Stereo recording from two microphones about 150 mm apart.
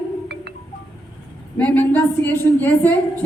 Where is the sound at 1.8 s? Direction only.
15° left (ahead or behind).